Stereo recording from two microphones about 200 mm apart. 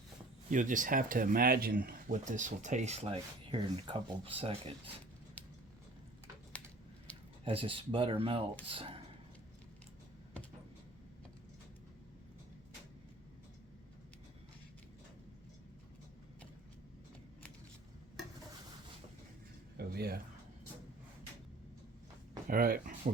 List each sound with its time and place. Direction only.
0.5 s speech: 40° right (ahead or behind)
7.4 s speech: 25° right (ahead or behind)
19.7 s a sound: 50° right (ahead or behind)
22.4 s speech: 45° right (ahead or behind)